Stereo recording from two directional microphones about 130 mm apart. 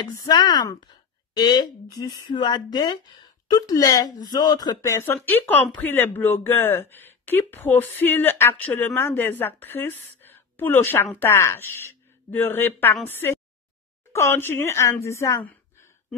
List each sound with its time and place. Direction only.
0.0 s speech: 30° left (ahead or behind)